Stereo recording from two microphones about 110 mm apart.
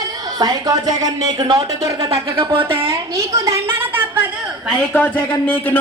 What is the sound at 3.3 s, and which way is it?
Speech, 30° right (ahead or behind).